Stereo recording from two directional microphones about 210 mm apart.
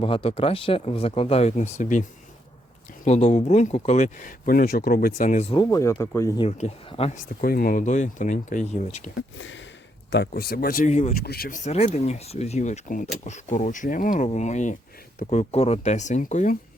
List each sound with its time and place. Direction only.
0.0 s speech: 25° left (ahead or behind)
6.4 s speech: 25° left (ahead or behind)
7.4 s speech: 45° left (ahead or behind)
9.1 s speech: 65° left (ahead or behind)
10.1 s speech: 50° left (ahead or behind); by 11.1 s 35° left (ahead or behind)
11.2 s speech: 45° left (ahead or behind)